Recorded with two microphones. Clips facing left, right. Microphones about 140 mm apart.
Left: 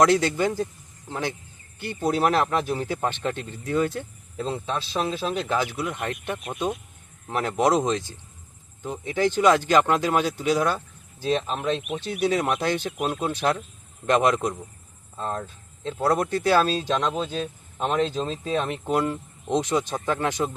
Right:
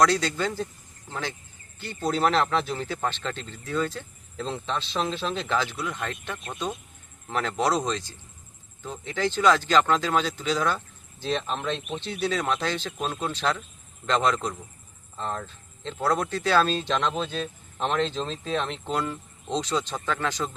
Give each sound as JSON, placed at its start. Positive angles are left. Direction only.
{"t": 0.0, "sound": "speech", "side_deg": 20}